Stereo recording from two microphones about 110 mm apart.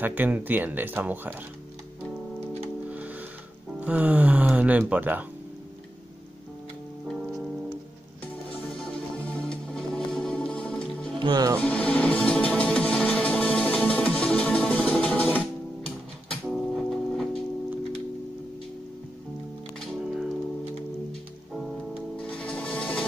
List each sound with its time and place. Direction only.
0.0 s speech: 15° right (ahead or behind)
2.9 s music: 15° right (ahead or behind)
3.8 s speech: 15° right (ahead or behind)
7.1 s music: centre (ahead or behind)
8.5 s music: 10° left (ahead or behind)
11.1 s speech: 40° right (ahead or behind)
11.6 s music: 10° left (ahead or behind)
20.0 s music: 5° right (ahead or behind)
22.1 s music: 10° left (ahead or behind)